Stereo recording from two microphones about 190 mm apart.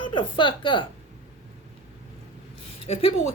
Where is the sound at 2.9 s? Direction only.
35° left (ahead or behind).